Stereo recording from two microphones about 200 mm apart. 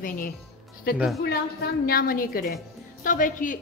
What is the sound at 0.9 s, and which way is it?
Speech, centre (ahead or behind).